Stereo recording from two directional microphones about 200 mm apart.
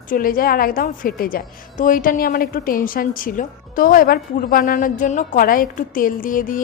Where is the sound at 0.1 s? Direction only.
45° left (ahead or behind).